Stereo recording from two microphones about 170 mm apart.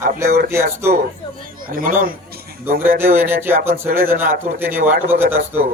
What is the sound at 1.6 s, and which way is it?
Speech, 55° right (ahead or behind).